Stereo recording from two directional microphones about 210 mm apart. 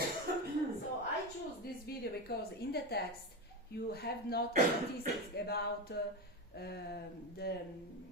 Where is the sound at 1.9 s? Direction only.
45° left (ahead or behind).